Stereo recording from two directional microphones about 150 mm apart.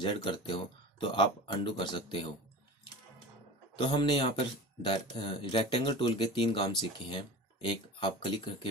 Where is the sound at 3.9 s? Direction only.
35° left (ahead or behind).